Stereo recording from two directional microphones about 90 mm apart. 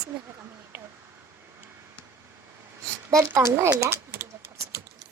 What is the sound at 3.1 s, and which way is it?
Speech, 35° right (ahead or behind).